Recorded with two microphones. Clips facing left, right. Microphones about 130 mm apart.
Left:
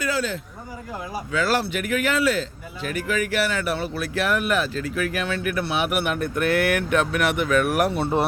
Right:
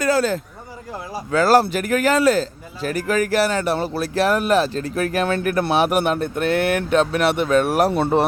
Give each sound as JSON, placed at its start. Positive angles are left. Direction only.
{"t": 0.0, "sound": "speech", "side_deg": -40}
{"t": 6.1, "sound": "speech", "side_deg": -25}